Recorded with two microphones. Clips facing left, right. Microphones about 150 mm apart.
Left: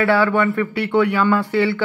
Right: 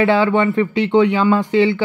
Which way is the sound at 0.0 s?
20° right (ahead or behind).